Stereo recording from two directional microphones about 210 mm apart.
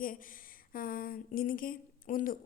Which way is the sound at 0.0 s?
40° left (ahead or behind).